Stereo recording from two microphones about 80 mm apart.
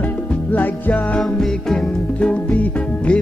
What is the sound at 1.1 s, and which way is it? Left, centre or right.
Music, centre.